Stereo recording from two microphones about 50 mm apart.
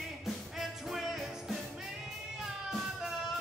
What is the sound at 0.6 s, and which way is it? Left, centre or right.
Music, centre.